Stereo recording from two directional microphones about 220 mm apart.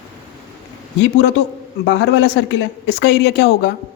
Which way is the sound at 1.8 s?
55° left (ahead or behind).